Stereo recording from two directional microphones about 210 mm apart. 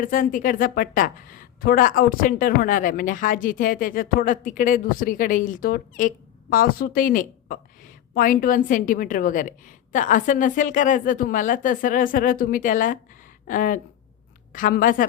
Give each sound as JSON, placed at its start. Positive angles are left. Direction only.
{"t": 0.0, "sound": "speech", "side_deg": 40}